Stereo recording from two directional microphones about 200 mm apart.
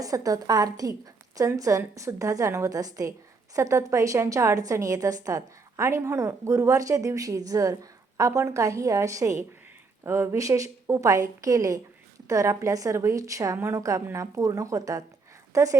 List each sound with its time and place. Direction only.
0.0 s a woman's voice: 15° right (ahead or behind)